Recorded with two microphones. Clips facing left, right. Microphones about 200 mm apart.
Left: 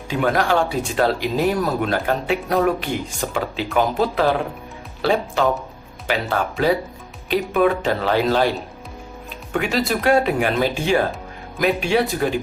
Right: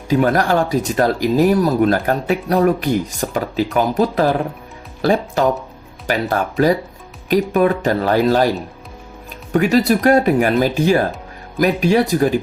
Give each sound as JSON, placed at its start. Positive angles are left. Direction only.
{"t": 0.1, "sound": "speech", "side_deg": -40}
{"t": 9.5, "sound": "speech", "side_deg": -40}